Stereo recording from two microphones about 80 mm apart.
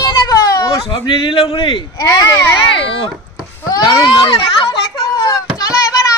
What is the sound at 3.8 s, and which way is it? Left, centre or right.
Speech, left.